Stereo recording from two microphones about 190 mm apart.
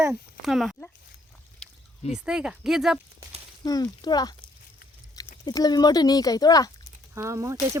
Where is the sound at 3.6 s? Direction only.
20° left (ahead or behind).